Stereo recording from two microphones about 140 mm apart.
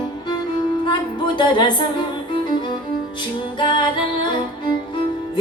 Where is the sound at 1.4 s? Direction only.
35° left (ahead or behind).